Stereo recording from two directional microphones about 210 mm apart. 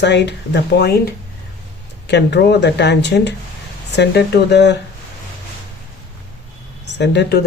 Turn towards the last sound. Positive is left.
turn(degrees=55)  # may be behind; listen again after turning